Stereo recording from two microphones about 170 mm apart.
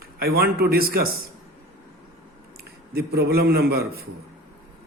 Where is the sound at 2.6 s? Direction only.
65° right (ahead or behind).